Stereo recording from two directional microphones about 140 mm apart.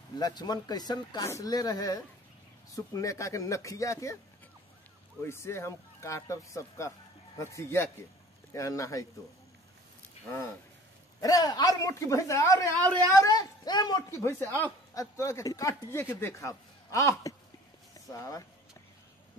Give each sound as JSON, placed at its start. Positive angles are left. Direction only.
{"t": 0.2, "sound": "speech", "side_deg": 30}
{"t": 5.2, "sound": "speech", "side_deg": 20}
{"t": 11.1, "sound": "speech", "side_deg": 25}